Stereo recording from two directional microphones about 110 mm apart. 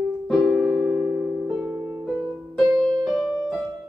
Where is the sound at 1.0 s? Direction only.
15° right (ahead or behind).